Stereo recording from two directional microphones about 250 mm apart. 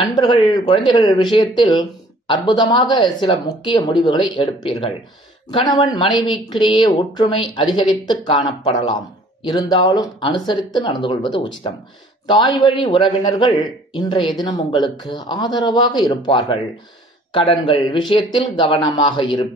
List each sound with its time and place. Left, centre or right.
0.0 s speech: centre